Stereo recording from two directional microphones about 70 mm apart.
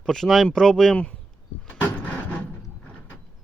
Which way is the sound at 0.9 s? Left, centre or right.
Centre.